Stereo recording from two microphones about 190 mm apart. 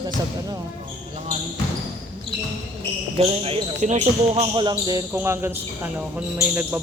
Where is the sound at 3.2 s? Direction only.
35° right (ahead or behind).